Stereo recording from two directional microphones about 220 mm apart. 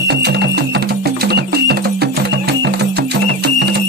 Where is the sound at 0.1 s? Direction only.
50° right (ahead or behind).